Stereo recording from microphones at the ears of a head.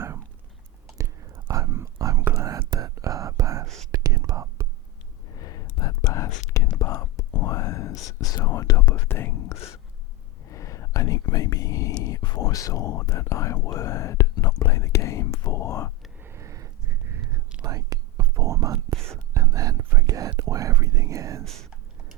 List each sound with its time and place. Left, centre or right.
0.9 s whispering: right
5.3 s whispering: left
16.2 s a sound: right
17.6 s whispering: right